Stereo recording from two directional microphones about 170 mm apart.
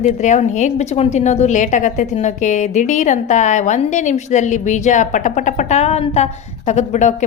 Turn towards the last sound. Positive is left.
turn(degrees=45)  # may be behind; listen again after turning